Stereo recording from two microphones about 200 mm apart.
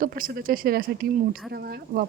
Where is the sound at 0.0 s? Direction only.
45° right (ahead or behind).